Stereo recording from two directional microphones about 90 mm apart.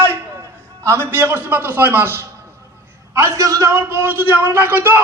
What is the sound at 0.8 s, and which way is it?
A man's voice, 30° right (ahead or behind).